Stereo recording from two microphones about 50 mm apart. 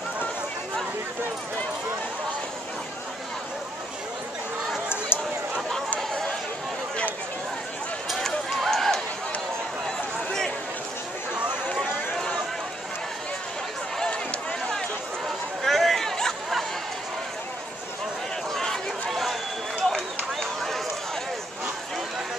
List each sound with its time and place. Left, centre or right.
5.1 s a sound: left
8.5 s run: centre
11.7 s run: centre
15.6 s chatter: centre
18.5 s chatter: centre
19.8 s run: centre